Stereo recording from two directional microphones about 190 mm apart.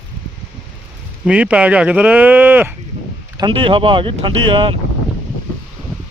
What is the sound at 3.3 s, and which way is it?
Speech, 25° right (ahead or behind).